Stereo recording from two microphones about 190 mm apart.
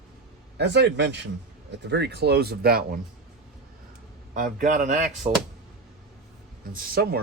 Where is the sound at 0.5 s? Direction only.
65° right (ahead or behind).